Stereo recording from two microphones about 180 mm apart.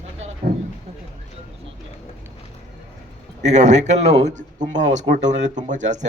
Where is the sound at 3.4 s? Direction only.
40° right (ahead or behind).